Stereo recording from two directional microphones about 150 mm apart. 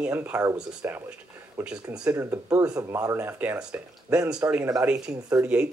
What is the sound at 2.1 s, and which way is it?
Speech, 15° right (ahead or behind).